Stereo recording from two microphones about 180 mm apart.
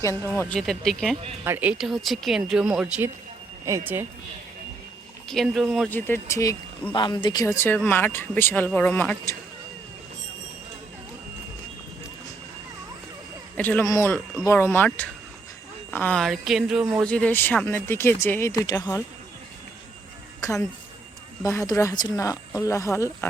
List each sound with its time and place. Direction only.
0.3 s speech: 5° left (ahead or behind)
1.5 s speech: 10° right (ahead or behind)
3.7 s speech: 15° right (ahead or behind)
5.3 s speech: centre (ahead or behind)
5.9 s speech: 10° left (ahead or behind)
13.6 s speech: 10° left (ahead or behind)
20.4 s speech: 15° left (ahead or behind)